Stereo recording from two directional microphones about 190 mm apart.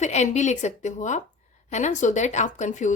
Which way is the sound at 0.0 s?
40° left (ahead or behind).